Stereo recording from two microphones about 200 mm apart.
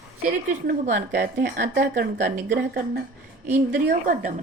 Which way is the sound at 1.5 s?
55° right (ahead or behind).